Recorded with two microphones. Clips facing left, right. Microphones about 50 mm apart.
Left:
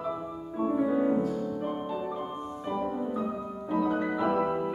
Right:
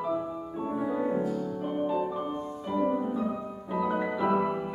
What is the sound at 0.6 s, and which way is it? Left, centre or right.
Music, centre.